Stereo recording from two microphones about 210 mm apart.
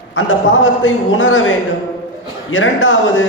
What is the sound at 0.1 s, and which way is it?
A man's voice, 70° left (ahead or behind).